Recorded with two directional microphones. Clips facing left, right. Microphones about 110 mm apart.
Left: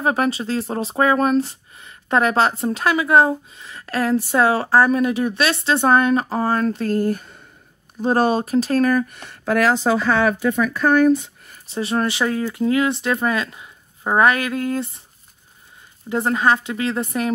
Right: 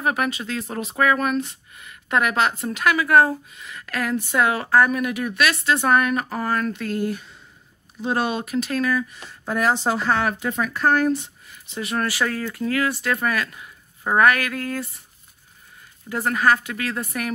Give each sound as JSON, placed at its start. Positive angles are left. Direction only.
{"t": 0.0, "sound": "speech", "side_deg": 30}
{"t": 11.4, "sound": "speech", "side_deg": 40}
{"t": 16.1, "sound": "speech", "side_deg": 25}